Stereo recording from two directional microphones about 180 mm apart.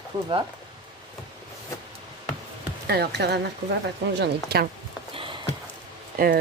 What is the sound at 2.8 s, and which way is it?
Speech, 65° right (ahead or behind).